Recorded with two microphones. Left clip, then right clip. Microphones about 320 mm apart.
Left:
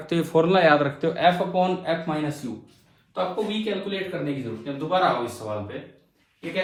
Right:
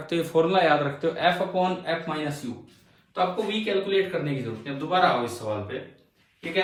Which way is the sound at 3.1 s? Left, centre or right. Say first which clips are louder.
Right 1 dB; centre.